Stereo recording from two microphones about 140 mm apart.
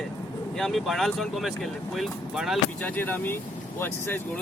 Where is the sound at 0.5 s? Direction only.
Centre (ahead or behind).